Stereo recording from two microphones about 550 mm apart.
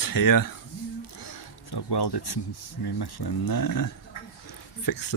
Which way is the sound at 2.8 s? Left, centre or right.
Left.